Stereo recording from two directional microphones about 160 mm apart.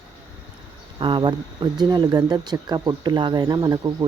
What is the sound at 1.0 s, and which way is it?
Speech, 30° right (ahead or behind).